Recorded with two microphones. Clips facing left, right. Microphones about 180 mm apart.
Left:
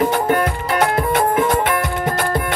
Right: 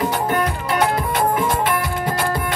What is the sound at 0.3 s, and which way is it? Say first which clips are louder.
Music: left 3 dB; 50° left (ahead or behind).